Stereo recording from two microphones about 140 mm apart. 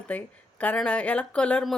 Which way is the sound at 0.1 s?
10° left (ahead or behind).